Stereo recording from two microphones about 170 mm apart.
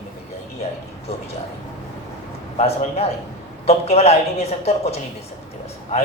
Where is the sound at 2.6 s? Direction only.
35° left (ahead or behind).